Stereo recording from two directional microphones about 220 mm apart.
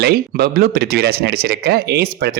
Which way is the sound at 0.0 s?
45° right (ahead or behind).